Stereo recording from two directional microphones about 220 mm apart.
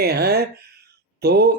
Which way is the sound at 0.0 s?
45° right (ahead or behind).